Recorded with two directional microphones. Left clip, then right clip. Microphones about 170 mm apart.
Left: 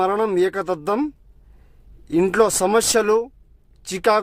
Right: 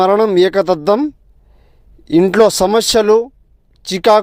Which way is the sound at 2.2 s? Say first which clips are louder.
Right 6 dB; 20° right (ahead or behind).